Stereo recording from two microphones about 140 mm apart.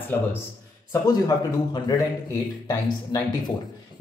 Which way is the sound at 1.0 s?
25° left (ahead or behind).